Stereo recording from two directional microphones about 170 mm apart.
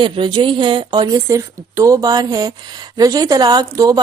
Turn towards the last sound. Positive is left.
turn(degrees=-20)  # may be behind; listen again after turning